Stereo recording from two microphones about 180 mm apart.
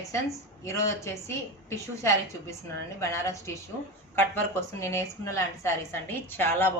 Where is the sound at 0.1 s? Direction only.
15° left (ahead or behind).